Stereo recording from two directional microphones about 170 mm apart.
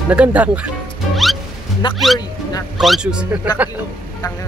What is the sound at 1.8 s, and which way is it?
Speech, 30° left (ahead or behind).